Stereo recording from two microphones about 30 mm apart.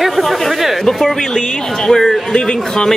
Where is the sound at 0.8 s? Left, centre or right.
Centre.